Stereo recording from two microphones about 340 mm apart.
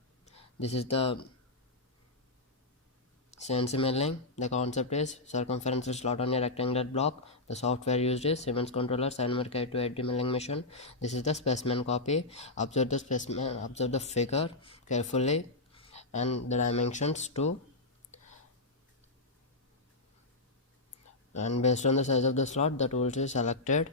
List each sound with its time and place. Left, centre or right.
0.3 s speech: centre
3.4 s speech: centre
21.6 s speech: centre